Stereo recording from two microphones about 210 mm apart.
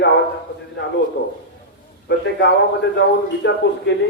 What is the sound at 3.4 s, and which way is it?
Speech, 55° left (ahead or behind).